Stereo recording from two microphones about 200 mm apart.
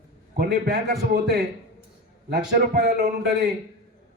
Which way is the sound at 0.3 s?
50° right (ahead or behind).